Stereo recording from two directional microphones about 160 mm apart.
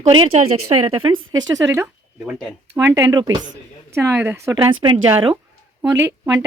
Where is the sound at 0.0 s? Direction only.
35° right (ahead or behind); by 2.6 s 5° right (ahead or behind).